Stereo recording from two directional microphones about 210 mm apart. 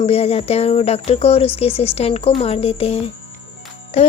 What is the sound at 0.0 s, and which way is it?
Speech, 30° left (ahead or behind).